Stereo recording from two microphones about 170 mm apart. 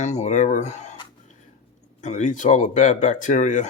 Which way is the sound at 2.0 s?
45° left (ahead or behind).